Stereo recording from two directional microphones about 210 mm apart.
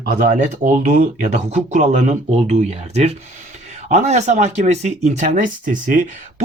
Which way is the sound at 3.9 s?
35° right (ahead or behind).